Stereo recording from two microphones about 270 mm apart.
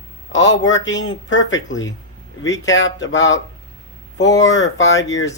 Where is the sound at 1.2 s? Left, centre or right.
Left.